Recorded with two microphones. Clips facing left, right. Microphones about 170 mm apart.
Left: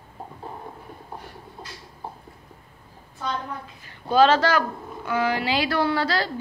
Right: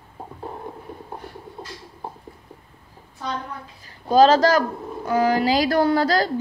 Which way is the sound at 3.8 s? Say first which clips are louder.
Right 3 dB; 40° right (ahead or behind).